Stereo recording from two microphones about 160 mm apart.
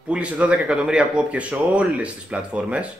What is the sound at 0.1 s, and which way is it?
Speech, 5° right (ahead or behind).